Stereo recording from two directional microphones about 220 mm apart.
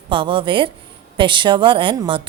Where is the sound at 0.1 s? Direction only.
25° right (ahead or behind).